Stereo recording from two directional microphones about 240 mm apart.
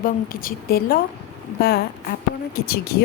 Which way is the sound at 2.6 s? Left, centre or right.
Left.